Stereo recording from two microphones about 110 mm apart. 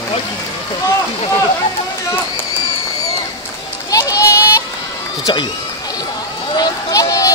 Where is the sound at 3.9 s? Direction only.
30° left (ahead or behind).